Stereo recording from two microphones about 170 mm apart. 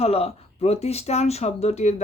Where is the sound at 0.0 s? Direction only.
35° left (ahead or behind).